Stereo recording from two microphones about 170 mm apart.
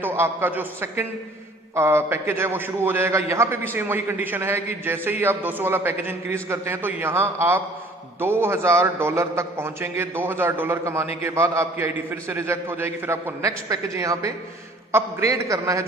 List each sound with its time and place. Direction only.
0.0 s a man's voice: 15° right (ahead or behind)